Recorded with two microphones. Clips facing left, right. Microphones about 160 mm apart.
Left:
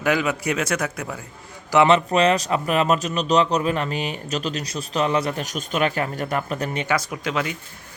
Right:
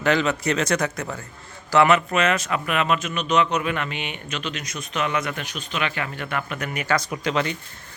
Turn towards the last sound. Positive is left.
turn(degrees=5)  # may be behind; listen again after turning